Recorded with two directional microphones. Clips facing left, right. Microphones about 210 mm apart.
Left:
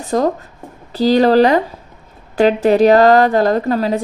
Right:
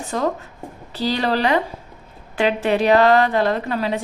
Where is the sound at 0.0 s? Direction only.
40° left (ahead or behind).